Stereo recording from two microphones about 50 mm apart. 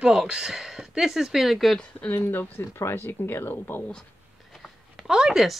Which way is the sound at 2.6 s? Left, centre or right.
Left.